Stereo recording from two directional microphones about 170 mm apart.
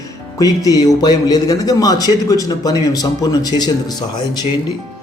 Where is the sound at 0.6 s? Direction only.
20° left (ahead or behind).